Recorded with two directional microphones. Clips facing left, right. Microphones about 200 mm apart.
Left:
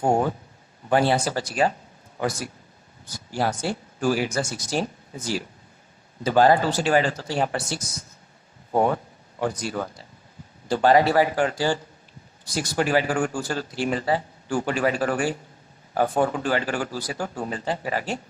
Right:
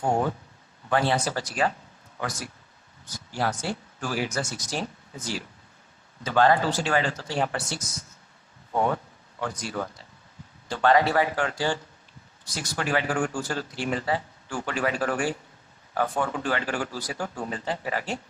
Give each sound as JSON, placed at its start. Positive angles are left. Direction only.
{"t": 0.0, "sound": "speech", "side_deg": 30}